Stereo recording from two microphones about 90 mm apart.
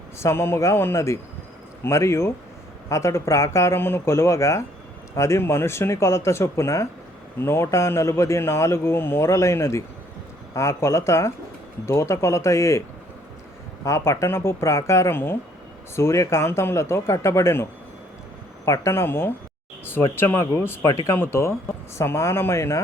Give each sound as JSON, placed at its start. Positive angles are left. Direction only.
{"t": 0.2, "sound": "a man's voice", "side_deg": 30}
{"t": 13.8, "sound": "a man's voice", "side_deg": 30}
{"t": 19.8, "sound": "a sound", "side_deg": 25}
{"t": 20.1, "sound": "a man's voice", "side_deg": 30}
{"t": 20.9, "sound": "speech", "side_deg": 40}
{"t": 21.2, "sound": "a man's voice", "side_deg": 30}